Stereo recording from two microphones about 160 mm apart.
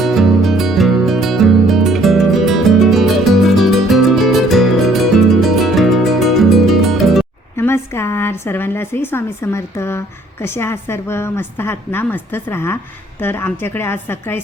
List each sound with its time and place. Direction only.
0.0 s music: centre (ahead or behind)
7.5 s a woman's voice: 15° left (ahead or behind)